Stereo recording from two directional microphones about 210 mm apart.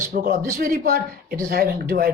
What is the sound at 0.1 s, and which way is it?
A woman's voice, 40° right (ahead or behind).